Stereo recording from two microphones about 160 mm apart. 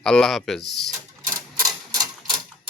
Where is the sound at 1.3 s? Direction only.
20° right (ahead or behind).